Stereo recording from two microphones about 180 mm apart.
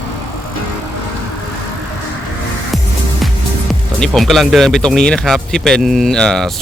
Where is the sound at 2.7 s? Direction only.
Centre (ahead or behind).